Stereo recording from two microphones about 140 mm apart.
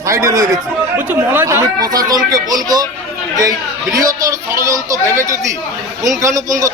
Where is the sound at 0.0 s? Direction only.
25° right (ahead or behind).